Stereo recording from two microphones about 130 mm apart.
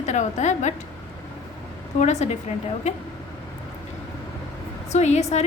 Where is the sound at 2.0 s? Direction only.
60° left (ahead or behind).